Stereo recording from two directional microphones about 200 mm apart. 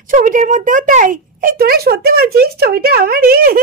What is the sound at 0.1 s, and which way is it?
Speech, 40° right (ahead or behind).